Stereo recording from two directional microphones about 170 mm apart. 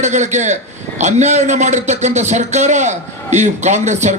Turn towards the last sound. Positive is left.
turn(degrees=-45)  # may be behind; listen again after turning